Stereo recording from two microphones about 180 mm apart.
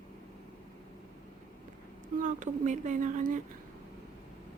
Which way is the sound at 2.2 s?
45° right (ahead or behind).